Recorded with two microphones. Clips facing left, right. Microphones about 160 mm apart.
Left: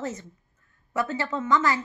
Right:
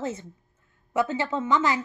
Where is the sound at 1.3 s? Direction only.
10° right (ahead or behind).